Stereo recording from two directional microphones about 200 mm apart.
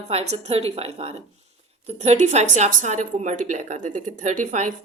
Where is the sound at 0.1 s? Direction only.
30° right (ahead or behind).